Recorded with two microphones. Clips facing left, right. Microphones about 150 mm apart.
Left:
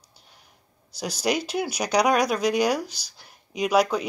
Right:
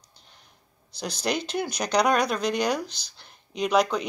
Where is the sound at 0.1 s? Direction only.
10° left (ahead or behind).